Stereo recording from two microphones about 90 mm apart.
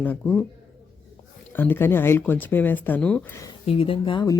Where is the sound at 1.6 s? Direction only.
25° left (ahead or behind).